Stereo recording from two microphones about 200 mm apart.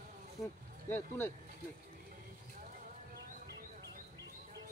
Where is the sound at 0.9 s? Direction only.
10° left (ahead or behind).